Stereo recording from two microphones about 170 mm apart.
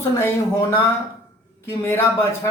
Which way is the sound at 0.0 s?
15° left (ahead or behind).